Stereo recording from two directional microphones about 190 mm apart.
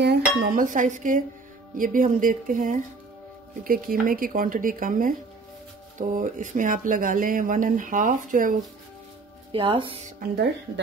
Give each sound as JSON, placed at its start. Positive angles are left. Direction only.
{"t": 0.0, "sound": "speech", "side_deg": -55}
{"t": 9.5, "sound": "speech", "side_deg": -30}